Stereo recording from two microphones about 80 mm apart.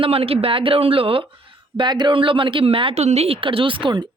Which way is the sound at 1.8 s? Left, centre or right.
Right.